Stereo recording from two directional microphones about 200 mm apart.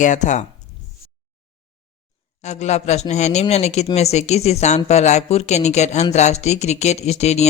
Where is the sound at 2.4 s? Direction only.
35° left (ahead or behind).